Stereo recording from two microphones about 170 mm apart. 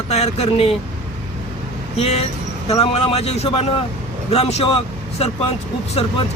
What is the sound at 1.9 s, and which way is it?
A man's voice, 35° left (ahead or behind).